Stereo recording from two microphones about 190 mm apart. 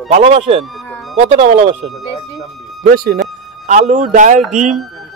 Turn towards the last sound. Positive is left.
turn(degrees=-45)  # may be behind; listen again after turning